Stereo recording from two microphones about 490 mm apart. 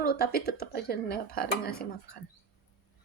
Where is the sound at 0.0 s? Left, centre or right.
Centre.